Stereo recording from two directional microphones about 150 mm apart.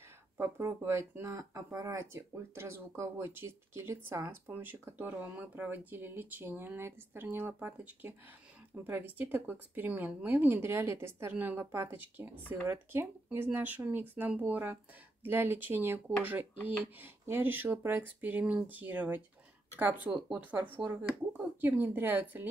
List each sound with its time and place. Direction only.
0.4 s speech: 15° right (ahead or behind)
17.0 s speech: 15° right (ahead or behind)